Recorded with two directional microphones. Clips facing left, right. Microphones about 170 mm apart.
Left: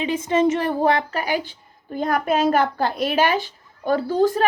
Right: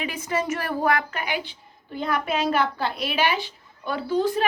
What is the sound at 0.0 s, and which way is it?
A woman's voice, 25° left (ahead or behind).